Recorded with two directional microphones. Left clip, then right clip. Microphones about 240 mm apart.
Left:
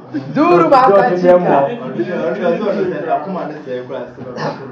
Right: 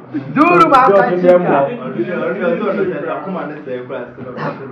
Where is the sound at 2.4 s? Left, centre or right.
Left.